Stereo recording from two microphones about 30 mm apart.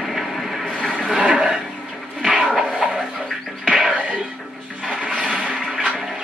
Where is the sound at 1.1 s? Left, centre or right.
Right.